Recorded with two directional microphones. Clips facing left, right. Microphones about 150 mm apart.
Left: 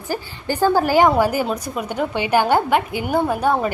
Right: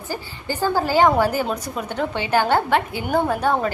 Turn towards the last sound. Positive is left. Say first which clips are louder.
# left 1 dB
turn(degrees=10)  # may be behind; listen again after turning